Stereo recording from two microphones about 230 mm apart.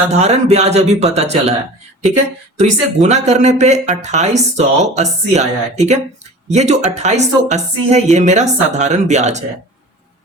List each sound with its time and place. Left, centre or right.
0.1 s speech: right
2.6 s a woman's voice: right